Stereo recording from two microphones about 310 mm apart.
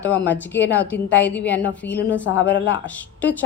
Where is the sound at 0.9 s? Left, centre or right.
Left.